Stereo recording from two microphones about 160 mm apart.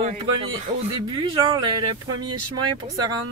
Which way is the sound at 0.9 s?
30° right (ahead or behind).